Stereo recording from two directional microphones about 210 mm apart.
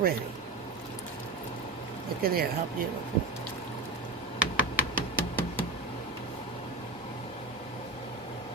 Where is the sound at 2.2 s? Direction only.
45° right (ahead or behind).